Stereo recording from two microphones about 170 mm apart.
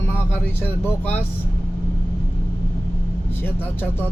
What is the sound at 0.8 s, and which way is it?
Speech, 10° left (ahead or behind).